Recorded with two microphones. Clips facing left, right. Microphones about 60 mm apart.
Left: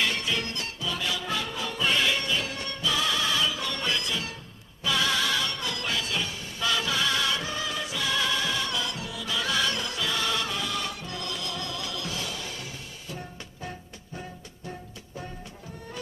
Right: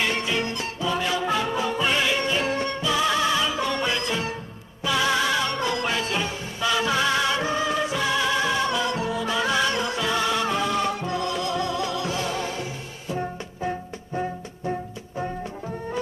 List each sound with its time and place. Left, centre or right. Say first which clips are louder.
0.0 s music: right 4 dB; right